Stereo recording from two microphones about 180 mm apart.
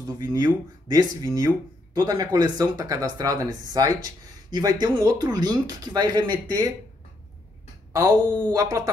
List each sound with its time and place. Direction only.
0.0 s speech: 20° right (ahead or behind)
7.9 s speech: 20° right (ahead or behind)